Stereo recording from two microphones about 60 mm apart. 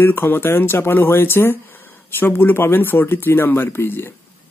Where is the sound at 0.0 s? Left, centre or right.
Left.